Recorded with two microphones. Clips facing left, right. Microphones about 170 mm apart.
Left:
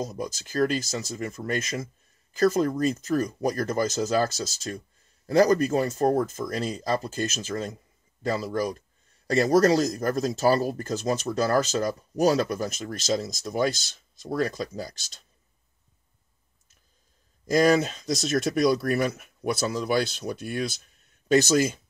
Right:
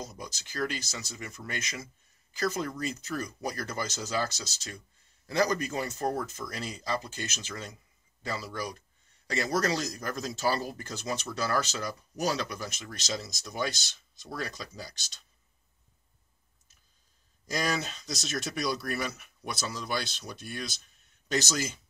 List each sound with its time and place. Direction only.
0.0 s speech: 45° left (ahead or behind)
17.5 s speech: 50° left (ahead or behind)